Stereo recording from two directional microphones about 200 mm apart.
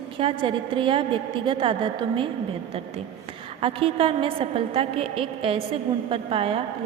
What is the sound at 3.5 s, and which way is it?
A woman's voice, 30° right (ahead or behind).